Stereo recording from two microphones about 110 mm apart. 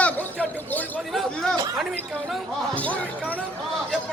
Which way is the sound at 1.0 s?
Centre (ahead or behind).